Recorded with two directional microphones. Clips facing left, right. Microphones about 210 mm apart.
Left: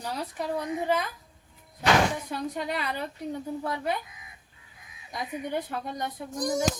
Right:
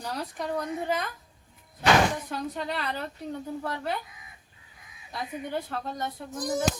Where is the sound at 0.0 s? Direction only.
5° left (ahead or behind).